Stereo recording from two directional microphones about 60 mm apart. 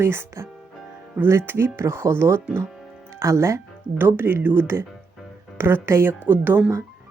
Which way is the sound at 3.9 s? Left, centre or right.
Right.